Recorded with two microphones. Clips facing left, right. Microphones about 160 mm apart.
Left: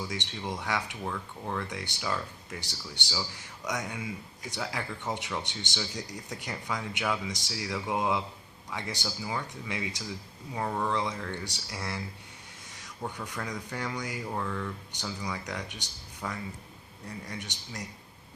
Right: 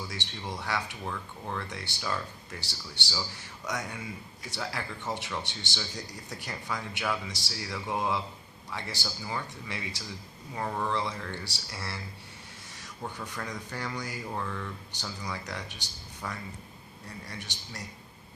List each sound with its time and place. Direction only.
0.0 s a man's voice: 15° left (ahead or behind); by 13.7 s centre (ahead or behind)
13.7 s speech: 15° left (ahead or behind)
14.3 s speech: 5° left (ahead or behind)